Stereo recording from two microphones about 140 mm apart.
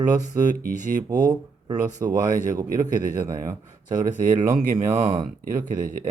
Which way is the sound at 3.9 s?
65° right (ahead or behind).